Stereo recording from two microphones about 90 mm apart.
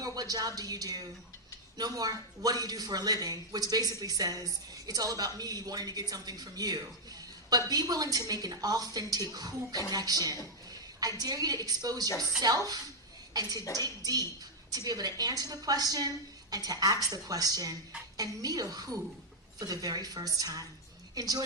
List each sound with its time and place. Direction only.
0.0 s a man's voice: 45° right (ahead or behind)